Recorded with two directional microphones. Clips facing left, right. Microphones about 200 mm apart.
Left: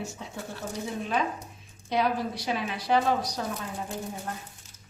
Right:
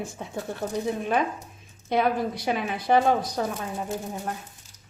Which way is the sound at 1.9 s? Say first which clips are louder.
Right 3 dB; 55° right (ahead or behind).